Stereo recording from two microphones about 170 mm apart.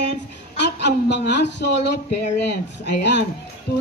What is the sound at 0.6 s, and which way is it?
Speech, 85° left.